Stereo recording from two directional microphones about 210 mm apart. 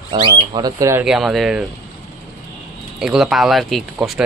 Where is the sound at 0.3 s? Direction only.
20° right (ahead or behind).